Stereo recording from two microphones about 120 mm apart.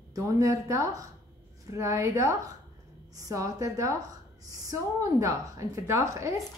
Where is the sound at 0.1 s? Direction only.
25° right (ahead or behind).